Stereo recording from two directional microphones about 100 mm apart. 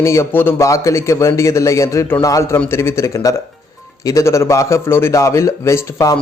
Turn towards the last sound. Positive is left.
turn(degrees=30)  # may be behind; listen again after turning